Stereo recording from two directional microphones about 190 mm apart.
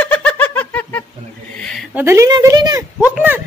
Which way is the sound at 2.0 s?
15° right (ahead or behind).